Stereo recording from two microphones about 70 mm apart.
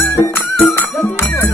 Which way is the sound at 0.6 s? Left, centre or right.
Left.